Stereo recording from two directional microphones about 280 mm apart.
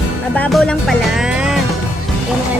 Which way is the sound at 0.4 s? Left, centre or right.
Centre.